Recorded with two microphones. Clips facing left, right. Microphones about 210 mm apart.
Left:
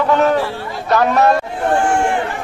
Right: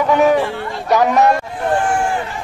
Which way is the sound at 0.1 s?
10° right (ahead or behind).